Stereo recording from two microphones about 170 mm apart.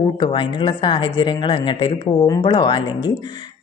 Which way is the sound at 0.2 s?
30° left (ahead or behind).